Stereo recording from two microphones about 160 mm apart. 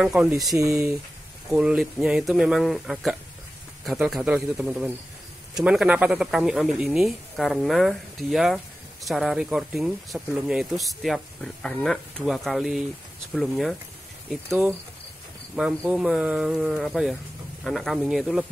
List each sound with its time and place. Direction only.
0.0 s speech: centre (ahead or behind)
0.6 s speech: 20° right (ahead or behind)
1.5 s a man's voice: 5° right (ahead or behind)
14.5 s a man's voice: 20° right (ahead or behind)
15.5 s speech: 5° right (ahead or behind)